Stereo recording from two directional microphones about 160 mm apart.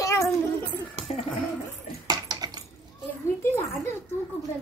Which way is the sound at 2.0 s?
25° right (ahead or behind).